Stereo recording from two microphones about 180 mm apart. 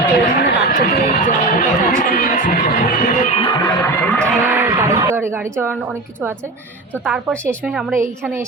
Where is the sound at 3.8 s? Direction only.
5° left (ahead or behind).